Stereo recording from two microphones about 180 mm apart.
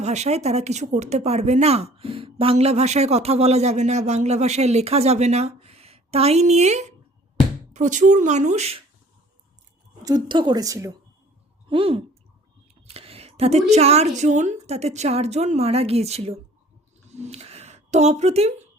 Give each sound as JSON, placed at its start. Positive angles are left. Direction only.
{"t": 0.0, "sound": "speech", "side_deg": -40}
{"t": 10.0, "sound": "speech", "side_deg": -20}
{"t": 11.7, "sound": "speech", "side_deg": -30}